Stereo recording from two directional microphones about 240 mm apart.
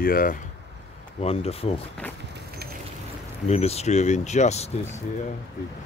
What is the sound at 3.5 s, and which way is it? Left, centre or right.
Speech, left.